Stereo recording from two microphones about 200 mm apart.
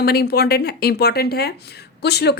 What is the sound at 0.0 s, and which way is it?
Speech, 50° left (ahead or behind).